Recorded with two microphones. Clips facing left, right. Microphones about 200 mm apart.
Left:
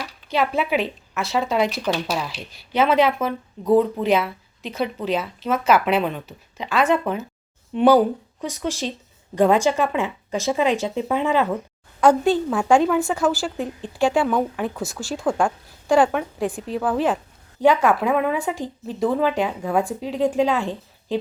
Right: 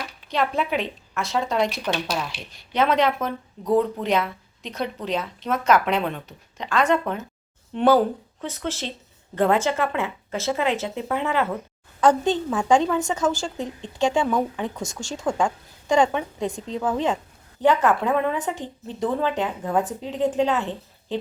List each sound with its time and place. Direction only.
0.3 s a woman's voice: 5° left (ahead or behind)